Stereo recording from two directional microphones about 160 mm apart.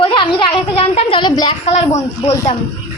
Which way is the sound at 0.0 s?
30° left (ahead or behind).